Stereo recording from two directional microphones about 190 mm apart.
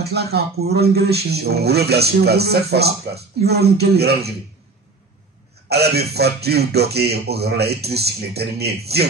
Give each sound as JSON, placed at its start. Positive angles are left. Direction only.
{"t": 0.0, "sound": "speech", "side_deg": -55}
{"t": 5.7, "sound": "speech", "side_deg": -55}